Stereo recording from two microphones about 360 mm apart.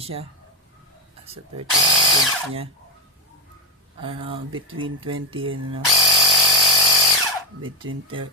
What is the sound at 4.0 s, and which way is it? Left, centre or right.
Speech, centre.